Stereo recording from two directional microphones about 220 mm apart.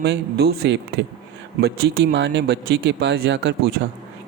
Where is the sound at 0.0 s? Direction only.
45° right (ahead or behind).